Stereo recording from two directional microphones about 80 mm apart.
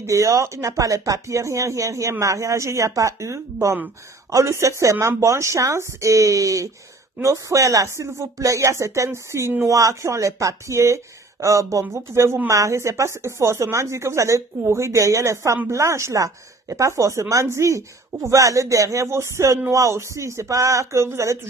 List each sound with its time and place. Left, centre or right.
0.0 s speech: right